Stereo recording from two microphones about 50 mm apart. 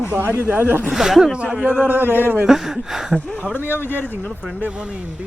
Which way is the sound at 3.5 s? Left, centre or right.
Left.